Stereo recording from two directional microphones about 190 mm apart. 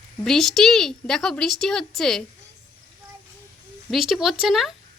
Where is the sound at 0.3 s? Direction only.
Centre (ahead or behind).